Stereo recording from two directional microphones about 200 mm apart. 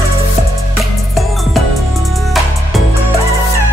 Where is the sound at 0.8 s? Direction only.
Centre (ahead or behind).